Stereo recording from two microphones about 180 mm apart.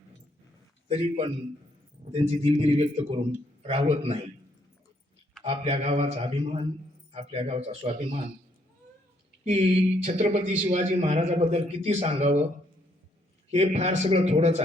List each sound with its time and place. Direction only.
0.9 s speech: 35° right (ahead or behind)
5.4 s speech: 35° right (ahead or behind)
9.4 s speech: 35° right (ahead or behind)
13.5 s speech: 40° right (ahead or behind)